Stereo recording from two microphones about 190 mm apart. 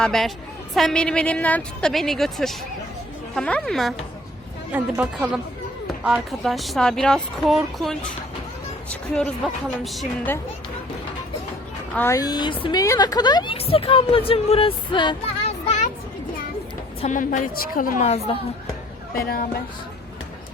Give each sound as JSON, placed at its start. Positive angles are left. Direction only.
{"t": 0.0, "sound": "speech", "side_deg": 0}
{"t": 11.9, "sound": "a woman's voice", "side_deg": 15}
{"t": 17.0, "sound": "a woman's voice", "side_deg": 40}
{"t": 19.1, "sound": "a woman's voice", "side_deg": 50}